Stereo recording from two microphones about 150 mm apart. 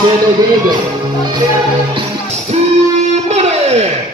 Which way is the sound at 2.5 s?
45° right (ahead or behind).